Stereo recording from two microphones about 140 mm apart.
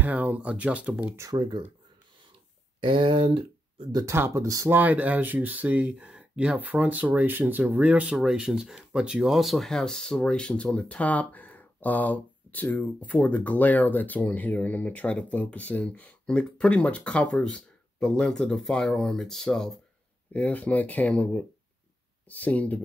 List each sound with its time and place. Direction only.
0.0 s speech: 10° right (ahead or behind)
1.1 s speech: 25° right (ahead or behind)
2.8 s speech: 35° right (ahead or behind)
4.0 s speech: 20° right (ahead or behind)
4.7 s speech: 10° right (ahead or behind); by 22.8 s 10° left (ahead or behind)